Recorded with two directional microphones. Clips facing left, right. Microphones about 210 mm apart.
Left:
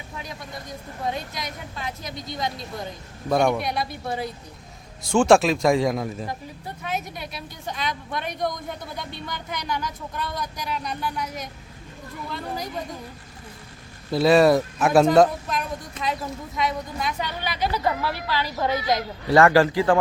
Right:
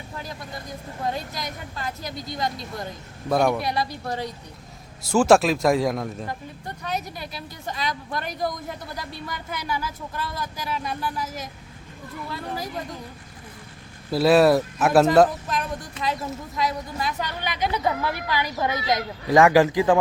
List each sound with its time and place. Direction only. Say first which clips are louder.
0.2 s speech: even; centre (ahead or behind)
14.1 s speech: even; 5° right (ahead or behind)
17.6 s speech: even; 20° right (ahead or behind)